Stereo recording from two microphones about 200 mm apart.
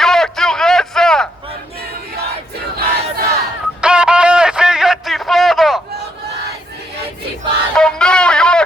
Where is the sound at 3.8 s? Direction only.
5° right (ahead or behind).